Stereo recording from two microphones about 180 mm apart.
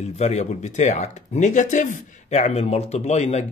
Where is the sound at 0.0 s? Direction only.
40° left (ahead or behind).